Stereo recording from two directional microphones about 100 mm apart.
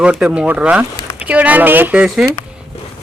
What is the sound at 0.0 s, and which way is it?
Speech, 10° right (ahead or behind).